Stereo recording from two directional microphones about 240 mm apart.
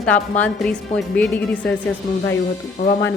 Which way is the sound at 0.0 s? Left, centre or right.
Centre.